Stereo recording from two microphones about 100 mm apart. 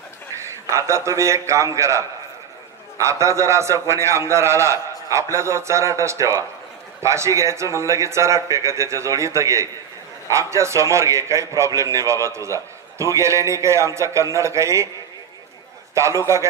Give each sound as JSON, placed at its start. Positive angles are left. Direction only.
{"t": 0.7, "sound": "a man's voice", "side_deg": -30}
{"t": 15.9, "sound": "a man's voice", "side_deg": -30}